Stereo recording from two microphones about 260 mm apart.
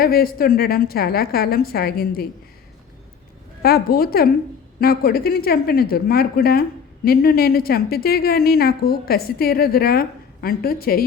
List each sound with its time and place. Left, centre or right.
0.0 s speech: left
3.6 s speech: left